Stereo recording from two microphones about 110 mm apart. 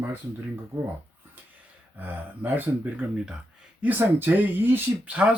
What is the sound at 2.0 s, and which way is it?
Speech, 15° right (ahead or behind).